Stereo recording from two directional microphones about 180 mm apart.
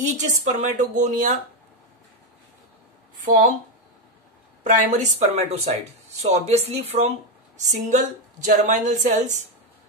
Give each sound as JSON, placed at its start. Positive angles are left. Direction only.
{"t": 0.0, "sound": "a woman's voice", "side_deg": -40}
{"t": 4.6, "sound": "a woman's voice", "side_deg": -45}